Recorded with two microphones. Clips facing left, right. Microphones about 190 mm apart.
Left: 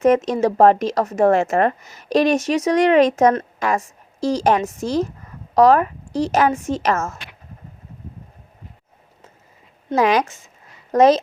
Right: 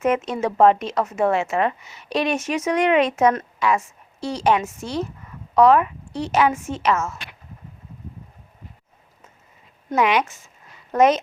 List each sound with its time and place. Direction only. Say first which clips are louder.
0.0 s a woman's voice: left 6 dB; 35° left (ahead or behind)
9.9 s speech: left 3 dB; 35° left (ahead or behind)